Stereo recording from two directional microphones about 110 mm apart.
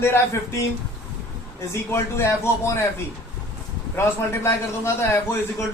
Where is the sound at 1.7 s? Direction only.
25° left (ahead or behind).